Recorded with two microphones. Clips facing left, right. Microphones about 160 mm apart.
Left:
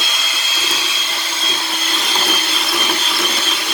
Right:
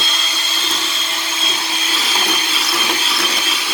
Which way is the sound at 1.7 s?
5° right (ahead or behind).